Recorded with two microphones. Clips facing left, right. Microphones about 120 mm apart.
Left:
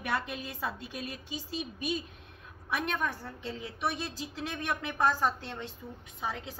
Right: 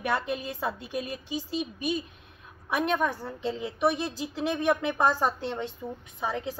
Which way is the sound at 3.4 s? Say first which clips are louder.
Right 8 dB; 20° right (ahead or behind).